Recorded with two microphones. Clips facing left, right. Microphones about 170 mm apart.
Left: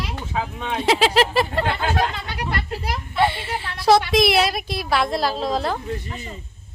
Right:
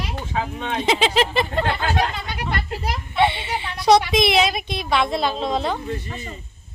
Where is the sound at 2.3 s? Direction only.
20° right (ahead or behind).